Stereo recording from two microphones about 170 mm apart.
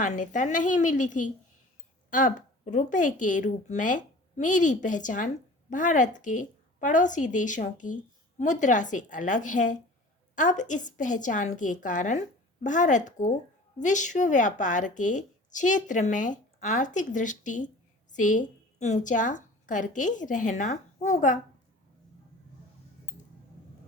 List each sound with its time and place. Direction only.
0.0 s a woman's voice: 50° left (ahead or behind)